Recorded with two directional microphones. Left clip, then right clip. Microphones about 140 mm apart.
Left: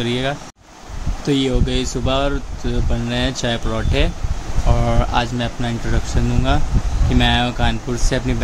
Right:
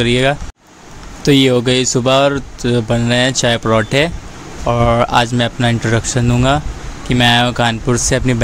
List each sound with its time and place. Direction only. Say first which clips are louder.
0.0 s speech: right 8 dB; 55° right (ahead or behind)
1.2 s speech: right 8 dB; 65° right (ahead or behind)